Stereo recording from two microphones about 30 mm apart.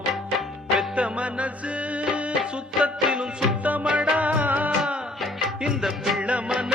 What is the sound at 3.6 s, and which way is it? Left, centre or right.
Music, right.